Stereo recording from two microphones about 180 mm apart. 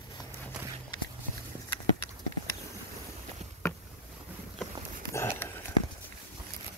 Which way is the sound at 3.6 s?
15° left (ahead or behind).